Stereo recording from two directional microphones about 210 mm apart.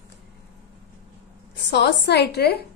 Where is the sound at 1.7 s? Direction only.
55° left (ahead or behind).